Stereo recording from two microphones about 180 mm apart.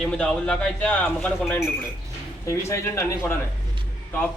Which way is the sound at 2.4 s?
15° left (ahead or behind).